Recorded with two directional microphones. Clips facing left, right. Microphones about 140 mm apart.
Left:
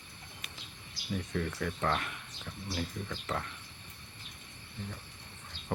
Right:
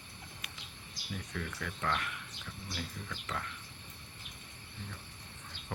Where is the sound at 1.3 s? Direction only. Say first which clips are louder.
Left 6 dB; 35° left (ahead or behind).